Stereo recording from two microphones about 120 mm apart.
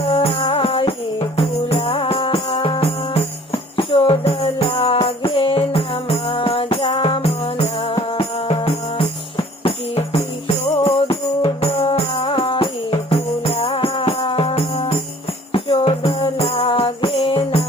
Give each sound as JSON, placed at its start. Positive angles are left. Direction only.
{"t": 0.1, "sound": "music", "side_deg": 55}